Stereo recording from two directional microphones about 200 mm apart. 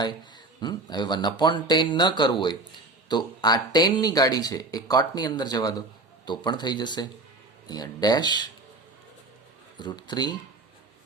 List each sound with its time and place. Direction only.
0.6 s speech: 20° left (ahead or behind)
9.7 s speech: 20° left (ahead or behind)